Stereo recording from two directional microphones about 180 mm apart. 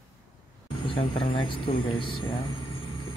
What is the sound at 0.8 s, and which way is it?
Speech, 30° left (ahead or behind).